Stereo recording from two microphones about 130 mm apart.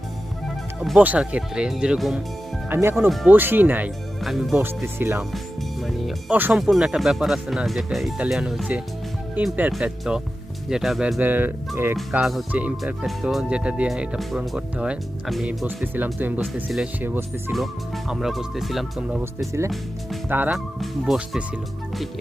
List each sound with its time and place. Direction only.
0.8 s speech: 5° right (ahead or behind)
2.6 s speech: 20° right (ahead or behind)
4.2 s speech: centre (ahead or behind)
4.5 s speech: 15° right (ahead or behind)
5.8 s speech: centre (ahead or behind)
11.2 s speech: 15° right (ahead or behind)
12.1 s speech: centre (ahead or behind)
17.5 s speech: centre (ahead or behind)
20.2 s speech: 10° right (ahead or behind)